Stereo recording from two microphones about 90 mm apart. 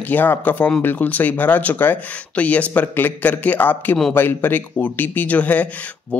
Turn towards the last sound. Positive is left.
turn(degrees=15)  # may be behind; listen again after turning